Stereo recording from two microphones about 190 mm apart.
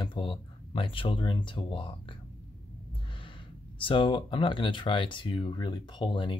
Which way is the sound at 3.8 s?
25° left (ahead or behind).